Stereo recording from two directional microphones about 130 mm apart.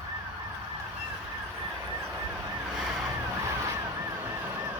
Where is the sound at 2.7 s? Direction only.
Centre (ahead or behind).